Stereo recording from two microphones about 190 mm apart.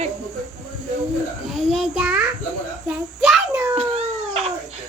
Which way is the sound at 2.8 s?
5° right (ahead or behind).